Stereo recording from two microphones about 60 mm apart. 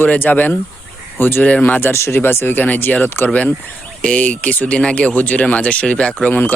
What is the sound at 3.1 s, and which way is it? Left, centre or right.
Speech, left.